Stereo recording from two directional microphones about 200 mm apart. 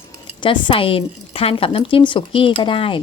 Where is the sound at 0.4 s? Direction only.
25° left (ahead or behind).